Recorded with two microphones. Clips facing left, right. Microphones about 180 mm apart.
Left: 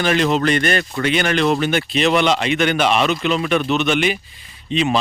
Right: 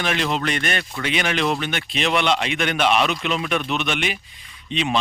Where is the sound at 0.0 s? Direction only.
Centre (ahead or behind).